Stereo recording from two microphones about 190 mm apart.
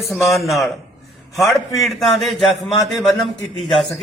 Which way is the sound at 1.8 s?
Centre (ahead or behind).